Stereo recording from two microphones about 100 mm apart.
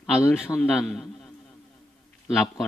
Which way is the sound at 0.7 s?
Centre (ahead or behind).